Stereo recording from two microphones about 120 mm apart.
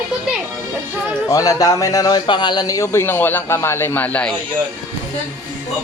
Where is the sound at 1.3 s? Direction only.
30° left (ahead or behind); by 4.3 s 10° left (ahead or behind).